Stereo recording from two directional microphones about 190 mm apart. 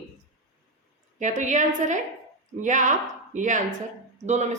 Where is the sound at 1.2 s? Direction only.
40° right (ahead or behind).